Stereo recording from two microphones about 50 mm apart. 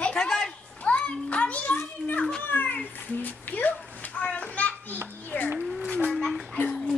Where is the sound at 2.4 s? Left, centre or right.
Left.